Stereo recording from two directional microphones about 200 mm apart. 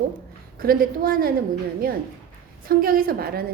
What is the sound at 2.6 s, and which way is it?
Speech, 45° right (ahead or behind).